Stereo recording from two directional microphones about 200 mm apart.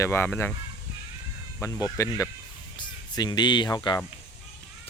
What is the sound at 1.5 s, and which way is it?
Speech, 15° left (ahead or behind).